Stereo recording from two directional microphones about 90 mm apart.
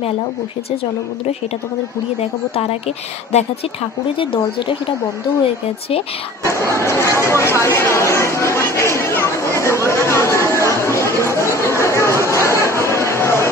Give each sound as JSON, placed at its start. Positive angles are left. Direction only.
{"t": 4.2, "sound": "speech", "side_deg": 70}
{"t": 6.4, "sound": "speech", "side_deg": 35}
{"t": 9.6, "sound": "chatter", "side_deg": 30}